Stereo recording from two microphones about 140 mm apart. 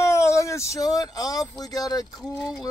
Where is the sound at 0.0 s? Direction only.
20° left (ahead or behind).